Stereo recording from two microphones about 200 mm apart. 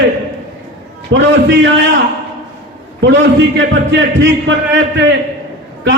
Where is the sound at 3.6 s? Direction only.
65° right (ahead or behind).